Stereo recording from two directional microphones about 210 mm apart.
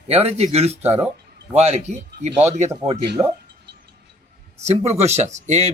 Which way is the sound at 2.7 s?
20° right (ahead or behind).